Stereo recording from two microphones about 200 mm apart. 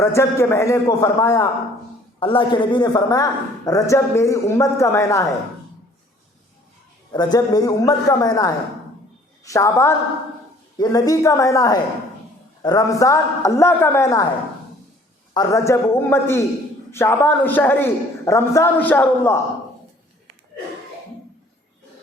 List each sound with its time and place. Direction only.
0.0 s a man's voice: 15° left (ahead or behind)
7.1 s a man's voice: 20° left (ahead or behind)
15.3 s a man's voice: 20° left (ahead or behind)